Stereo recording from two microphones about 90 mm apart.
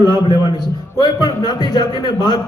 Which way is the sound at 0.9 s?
50° left (ahead or behind).